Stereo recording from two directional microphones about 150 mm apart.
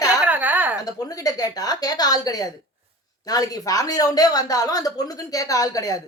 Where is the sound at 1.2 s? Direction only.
25° left (ahead or behind).